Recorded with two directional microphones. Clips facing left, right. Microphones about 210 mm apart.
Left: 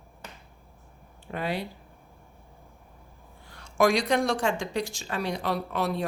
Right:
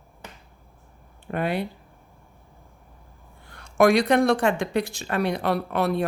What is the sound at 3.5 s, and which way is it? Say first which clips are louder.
Speech: right 5 dB; 55° right (ahead or behind).